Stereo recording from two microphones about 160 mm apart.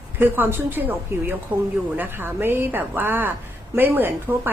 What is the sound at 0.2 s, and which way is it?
A woman's voice, 15° right (ahead or behind).